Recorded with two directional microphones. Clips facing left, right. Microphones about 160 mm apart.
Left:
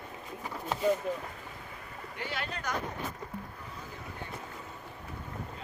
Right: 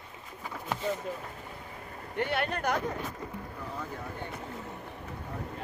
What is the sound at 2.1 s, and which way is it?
Speech, 60° right (ahead or behind).